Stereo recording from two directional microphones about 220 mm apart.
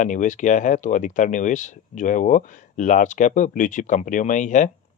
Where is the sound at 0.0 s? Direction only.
35° left (ahead or behind).